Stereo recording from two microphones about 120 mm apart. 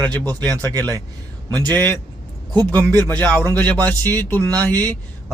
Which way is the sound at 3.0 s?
15° left (ahead or behind).